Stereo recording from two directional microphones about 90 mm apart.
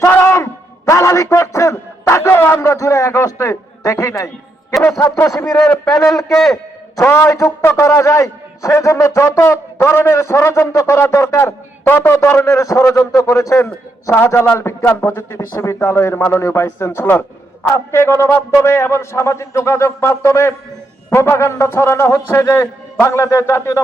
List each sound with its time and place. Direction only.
0.0 s a sound: 30° left (ahead or behind)
0.9 s a man's voice: 35° left (ahead or behind)
6.2 s a man's voice: centre (ahead or behind)
7.0 s a man's voice: 30° left (ahead or behind)